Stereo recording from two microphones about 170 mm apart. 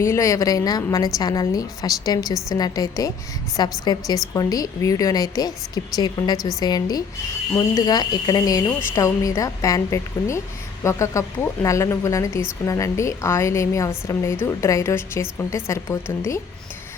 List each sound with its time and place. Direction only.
0.0 s a woman's voice: 15° left (ahead or behind)